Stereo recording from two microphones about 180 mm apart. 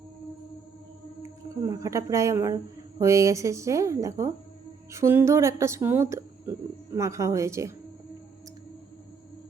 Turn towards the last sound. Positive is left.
turn(degrees=-15)  # may be behind; listen again after turning